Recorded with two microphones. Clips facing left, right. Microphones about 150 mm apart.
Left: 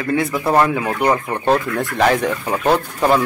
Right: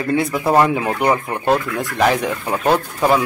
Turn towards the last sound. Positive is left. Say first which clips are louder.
# even
turn(degrees=-5)  # may be behind; listen again after turning